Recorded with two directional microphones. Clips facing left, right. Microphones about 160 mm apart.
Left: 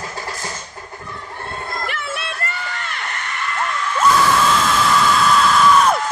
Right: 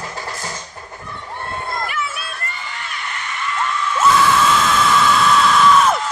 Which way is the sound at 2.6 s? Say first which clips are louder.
Left 3 dB; 55° left (ahead or behind).